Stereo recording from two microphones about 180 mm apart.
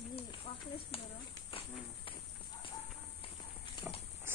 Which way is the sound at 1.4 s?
30° left (ahead or behind).